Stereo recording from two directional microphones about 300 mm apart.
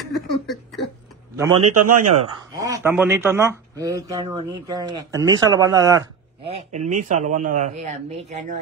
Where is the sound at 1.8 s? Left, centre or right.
Right.